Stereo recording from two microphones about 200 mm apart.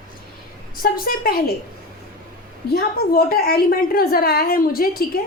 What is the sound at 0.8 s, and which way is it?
Speech, 45° left (ahead or behind).